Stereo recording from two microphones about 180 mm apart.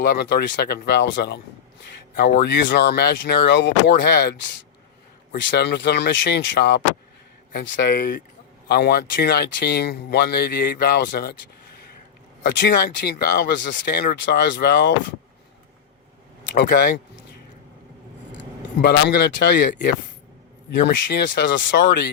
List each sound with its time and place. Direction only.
0.0 s speech: 65° left (ahead or behind); by 2.6 s 80° left
2.6 s speech: 65° left (ahead or behind)
5.4 s speech: 75° left (ahead or behind); by 11.3 s 60° left (ahead or behind)
12.5 s speech: 65° left (ahead or behind)
16.6 s speech: 55° left (ahead or behind)
18.8 s speech: 65° left (ahead or behind)